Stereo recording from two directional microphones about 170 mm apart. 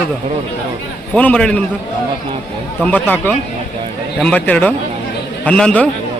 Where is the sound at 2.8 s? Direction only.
10° left (ahead or behind).